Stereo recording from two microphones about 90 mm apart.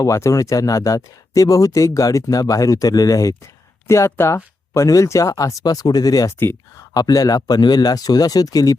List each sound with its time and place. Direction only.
0.0 s speech: 35° left (ahead or behind)
6.4 s speech: 25° left (ahead or behind)
6.9 s a man's voice: 45° left (ahead or behind)